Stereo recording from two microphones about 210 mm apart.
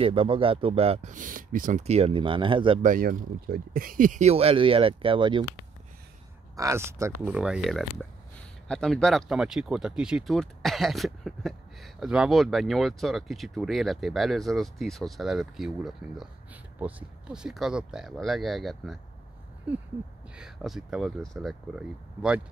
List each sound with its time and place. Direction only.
0.0 s speech: 25° right (ahead or behind)
2.8 s speech: 40° right (ahead or behind); by 5.4 s 25° right (ahead or behind)
6.5 s speech: 15° right (ahead or behind)
20.3 s speech: centre (ahead or behind)